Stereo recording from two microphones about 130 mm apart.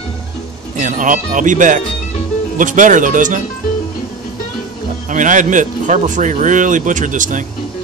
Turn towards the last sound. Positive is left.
turn(degrees=-80)